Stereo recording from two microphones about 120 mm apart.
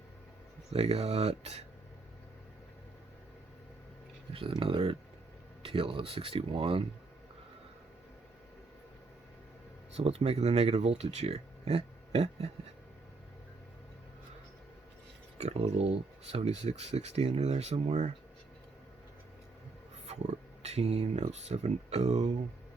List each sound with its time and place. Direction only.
0.7 s speech: 60° right (ahead or behind)
4.4 s speech: 45° right (ahead or behind)
9.9 s speech: 60° right (ahead or behind)
15.4 s speech: 65° right (ahead or behind)
20.6 s speech: 60° right (ahead or behind)